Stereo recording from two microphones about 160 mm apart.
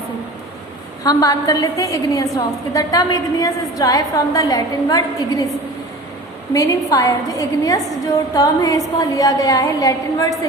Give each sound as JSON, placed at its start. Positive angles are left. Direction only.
{"t": 1.0, "sound": "a woman's voice", "side_deg": 20}
{"t": 6.5, "sound": "a woman's voice", "side_deg": 20}